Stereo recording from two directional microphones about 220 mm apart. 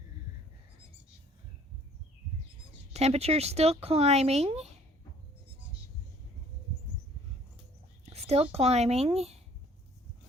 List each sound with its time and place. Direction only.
2.9 s speech: 30° right (ahead or behind)
8.0 s speech: 30° right (ahead or behind)